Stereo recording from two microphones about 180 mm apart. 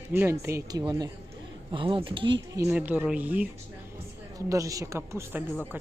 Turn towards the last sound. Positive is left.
turn(degrees=-15)  # may be behind; listen again after turning